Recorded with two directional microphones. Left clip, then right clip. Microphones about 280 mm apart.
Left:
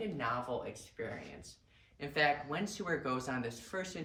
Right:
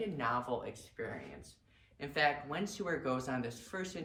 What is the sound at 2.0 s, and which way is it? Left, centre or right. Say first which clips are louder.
Speech: left 1 dB; centre.